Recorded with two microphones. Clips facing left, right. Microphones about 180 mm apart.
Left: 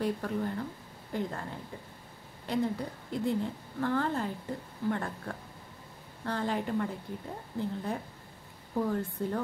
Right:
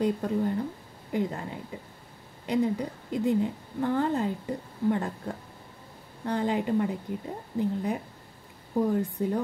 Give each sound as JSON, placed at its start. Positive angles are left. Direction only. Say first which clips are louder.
{"t": 0.0, "sound": "speech", "louder": "right 5 dB", "side_deg": -20}